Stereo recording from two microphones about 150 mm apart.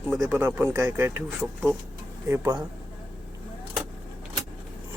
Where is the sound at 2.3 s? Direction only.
25° right (ahead or behind).